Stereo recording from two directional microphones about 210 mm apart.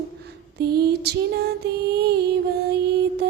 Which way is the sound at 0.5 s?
50° right (ahead or behind).